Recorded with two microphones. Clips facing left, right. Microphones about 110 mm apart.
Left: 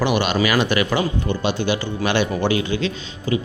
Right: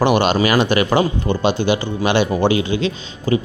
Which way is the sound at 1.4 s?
20° right (ahead or behind).